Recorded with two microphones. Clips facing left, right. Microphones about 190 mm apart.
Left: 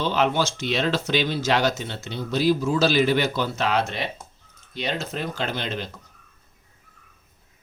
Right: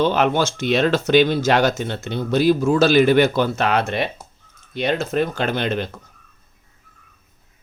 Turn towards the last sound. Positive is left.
turn(degrees=-60)  # may be behind; listen again after turning